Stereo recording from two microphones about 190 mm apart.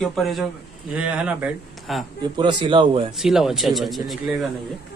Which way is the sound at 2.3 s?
25° right (ahead or behind).